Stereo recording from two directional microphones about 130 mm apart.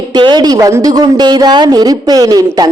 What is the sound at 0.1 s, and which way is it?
A woman's voice, 35° right (ahead or behind).